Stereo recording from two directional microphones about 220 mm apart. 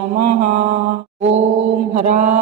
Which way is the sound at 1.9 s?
35° right (ahead or behind).